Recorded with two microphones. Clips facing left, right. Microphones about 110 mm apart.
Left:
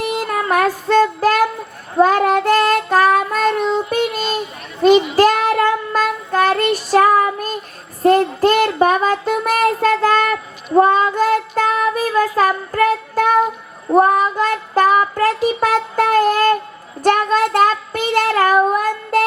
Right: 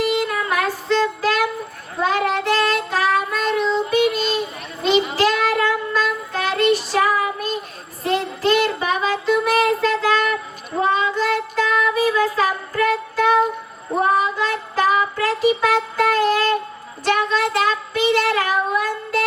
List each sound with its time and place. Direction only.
0.0 s child singing: 45° left (ahead or behind)